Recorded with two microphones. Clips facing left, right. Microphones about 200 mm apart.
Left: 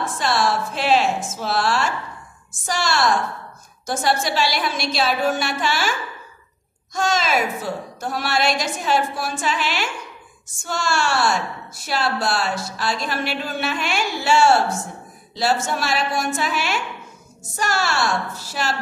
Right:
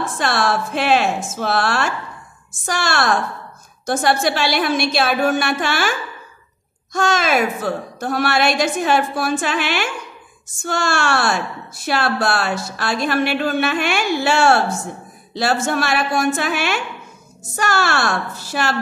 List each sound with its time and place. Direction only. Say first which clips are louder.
0.2 s a woman's voice: right 1 dB; 60° right (ahead or behind)